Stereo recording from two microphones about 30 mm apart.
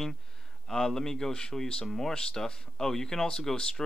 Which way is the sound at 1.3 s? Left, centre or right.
Left.